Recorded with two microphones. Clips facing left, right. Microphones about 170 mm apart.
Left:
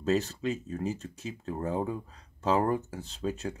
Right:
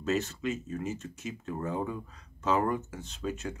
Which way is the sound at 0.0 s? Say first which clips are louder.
Left 2 dB; 35° left (ahead or behind).